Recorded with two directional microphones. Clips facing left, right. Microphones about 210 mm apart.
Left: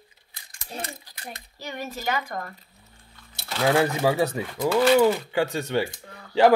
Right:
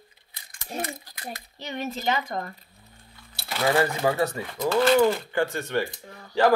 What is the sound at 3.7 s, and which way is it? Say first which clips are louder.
Speech: left 1 dB; 10° left (ahead or behind).